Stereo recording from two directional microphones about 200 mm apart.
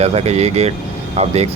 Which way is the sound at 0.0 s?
30° right (ahead or behind).